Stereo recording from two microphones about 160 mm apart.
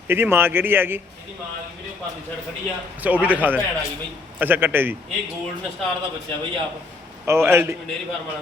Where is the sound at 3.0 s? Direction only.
10° right (ahead or behind).